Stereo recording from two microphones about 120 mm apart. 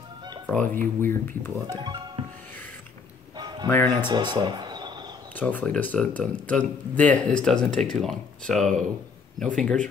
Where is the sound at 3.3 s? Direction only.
35° right (ahead or behind).